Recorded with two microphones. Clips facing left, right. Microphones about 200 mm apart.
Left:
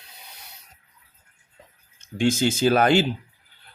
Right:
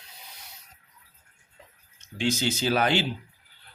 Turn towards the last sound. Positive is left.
turn(degrees=45)  # may be behind; listen again after turning